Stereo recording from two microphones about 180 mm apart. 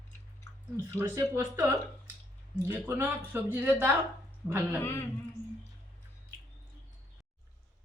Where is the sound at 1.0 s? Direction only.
15° right (ahead or behind).